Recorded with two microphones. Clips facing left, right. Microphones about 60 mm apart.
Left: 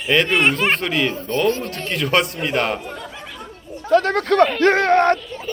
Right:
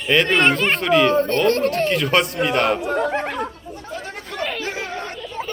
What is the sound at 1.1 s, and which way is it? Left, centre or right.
Speech, right.